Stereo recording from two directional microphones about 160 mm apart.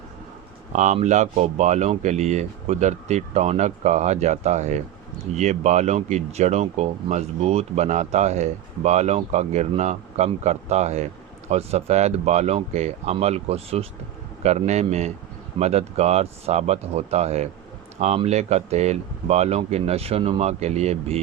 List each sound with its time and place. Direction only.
0.7 s speech: 50° right (ahead or behind)